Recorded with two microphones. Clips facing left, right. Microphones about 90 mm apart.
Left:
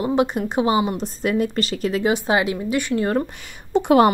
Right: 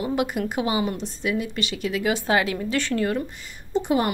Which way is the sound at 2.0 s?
20° left (ahead or behind).